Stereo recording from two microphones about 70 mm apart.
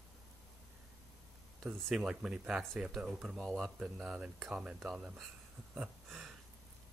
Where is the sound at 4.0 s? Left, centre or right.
Centre.